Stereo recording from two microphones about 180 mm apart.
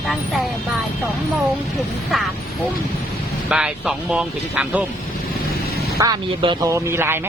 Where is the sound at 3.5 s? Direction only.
5° right (ahead or behind).